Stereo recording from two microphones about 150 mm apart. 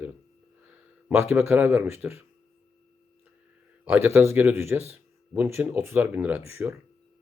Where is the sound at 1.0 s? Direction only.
10° right (ahead or behind).